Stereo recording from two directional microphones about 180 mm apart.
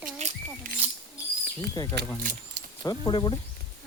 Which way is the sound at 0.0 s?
45° right (ahead or behind).